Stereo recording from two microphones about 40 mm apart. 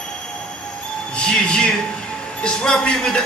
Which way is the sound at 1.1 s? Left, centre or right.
Centre.